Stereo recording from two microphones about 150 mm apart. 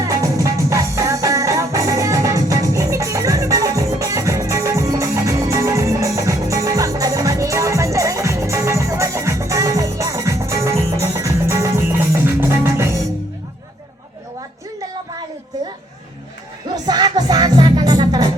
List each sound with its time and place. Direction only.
0.0 s music: 20° right (ahead or behind)
16.7 s music: 30° right (ahead or behind)